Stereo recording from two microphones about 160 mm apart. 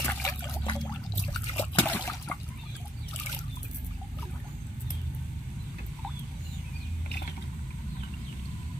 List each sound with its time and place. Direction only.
0.0 s water: 20° left (ahead or behind)
1.8 s water: 15° left (ahead or behind)